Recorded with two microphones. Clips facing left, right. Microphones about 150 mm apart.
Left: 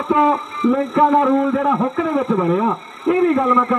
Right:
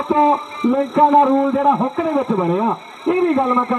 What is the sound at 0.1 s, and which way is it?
Music, 30° right (ahead or behind).